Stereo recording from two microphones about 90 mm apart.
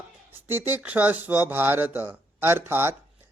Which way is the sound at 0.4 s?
25° right (ahead or behind).